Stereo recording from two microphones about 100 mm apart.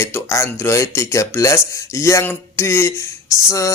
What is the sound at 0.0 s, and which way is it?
Speech, 30° left (ahead or behind).